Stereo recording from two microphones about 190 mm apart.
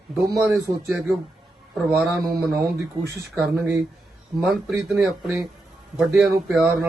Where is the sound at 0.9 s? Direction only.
Centre (ahead or behind).